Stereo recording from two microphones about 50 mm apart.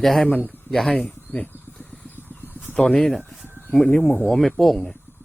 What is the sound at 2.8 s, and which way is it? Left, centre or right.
A man's voice, centre.